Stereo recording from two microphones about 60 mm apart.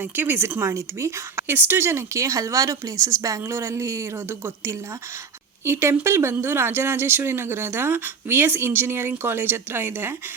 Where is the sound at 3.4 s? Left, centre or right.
Right.